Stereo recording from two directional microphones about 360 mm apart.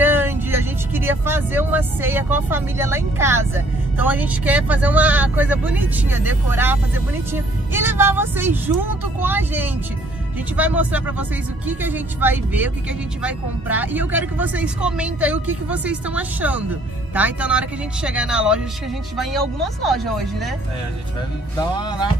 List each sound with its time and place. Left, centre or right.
0.0 s speech: centre
21.5 s speech: centre